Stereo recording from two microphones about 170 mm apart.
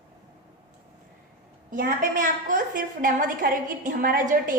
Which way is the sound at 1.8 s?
50° right (ahead or behind).